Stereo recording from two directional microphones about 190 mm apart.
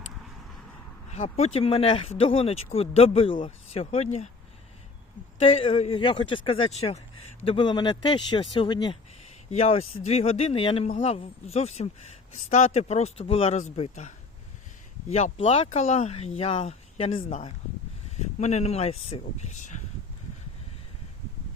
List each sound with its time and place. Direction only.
1.1 s speech: 35° left (ahead or behind)
5.4 s speech: 30° left (ahead or behind)
9.5 s speech: 35° left (ahead or behind)
15.1 s speech: 30° left (ahead or behind)